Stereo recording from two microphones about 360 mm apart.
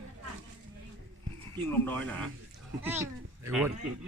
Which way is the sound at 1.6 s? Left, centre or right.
Centre.